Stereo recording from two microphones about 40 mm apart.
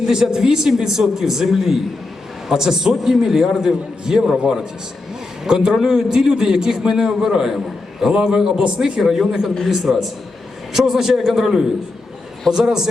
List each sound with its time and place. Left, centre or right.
0.0 s a man's voice: centre
5.5 s a man's voice: centre